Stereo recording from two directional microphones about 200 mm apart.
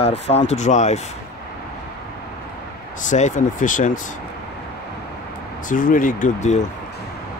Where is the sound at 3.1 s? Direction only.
40° left (ahead or behind).